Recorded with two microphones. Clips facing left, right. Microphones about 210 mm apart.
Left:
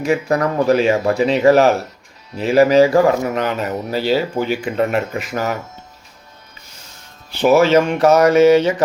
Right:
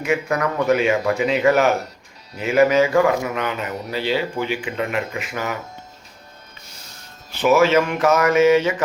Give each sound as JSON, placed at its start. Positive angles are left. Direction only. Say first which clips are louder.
{"t": 0.0, "sound": "speech", "louder": "left 4 dB", "side_deg": 35}
{"t": 7.3, "sound": "speech", "louder": "left 3 dB", "side_deg": 30}